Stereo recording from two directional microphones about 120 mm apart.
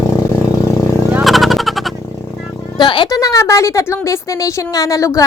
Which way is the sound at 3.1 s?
25° left (ahead or behind).